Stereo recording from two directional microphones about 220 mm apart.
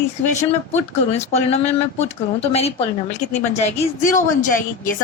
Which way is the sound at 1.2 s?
30° left (ahead or behind).